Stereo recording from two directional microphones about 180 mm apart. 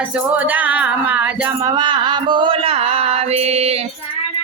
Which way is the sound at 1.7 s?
25° right (ahead or behind).